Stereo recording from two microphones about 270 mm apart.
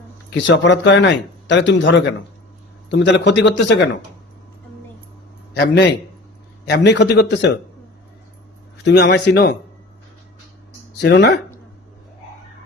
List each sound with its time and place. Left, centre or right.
0.3 s speech: left
5.5 s speech: left
8.8 s speech: left
11.0 s speech: left